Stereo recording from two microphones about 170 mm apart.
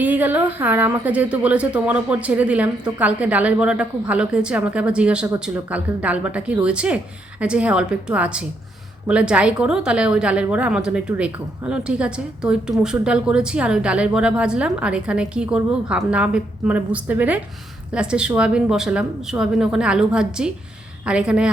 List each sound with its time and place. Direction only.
0.0 s a woman's voice: 10° right (ahead or behind)